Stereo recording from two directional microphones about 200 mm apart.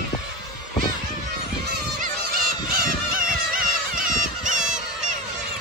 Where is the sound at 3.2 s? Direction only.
45° right (ahead or behind).